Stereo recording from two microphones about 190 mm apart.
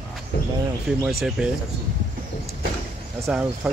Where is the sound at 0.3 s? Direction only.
60° left (ahead or behind).